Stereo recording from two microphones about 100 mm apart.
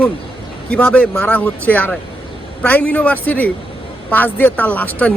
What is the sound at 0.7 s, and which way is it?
Speech, 15° left (ahead or behind).